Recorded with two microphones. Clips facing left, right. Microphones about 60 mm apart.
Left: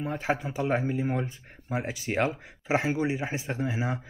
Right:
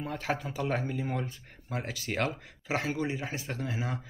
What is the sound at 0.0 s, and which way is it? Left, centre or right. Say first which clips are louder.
Speech: left 4 dB; left.